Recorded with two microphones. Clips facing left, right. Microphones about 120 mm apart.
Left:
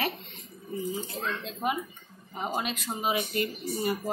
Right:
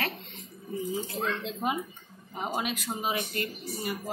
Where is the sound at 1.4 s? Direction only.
20° right (ahead or behind).